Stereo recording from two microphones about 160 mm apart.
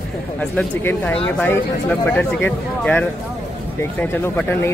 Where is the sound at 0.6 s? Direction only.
10° left (ahead or behind).